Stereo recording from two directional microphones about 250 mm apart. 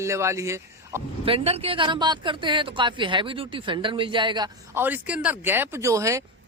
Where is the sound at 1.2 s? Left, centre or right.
Right.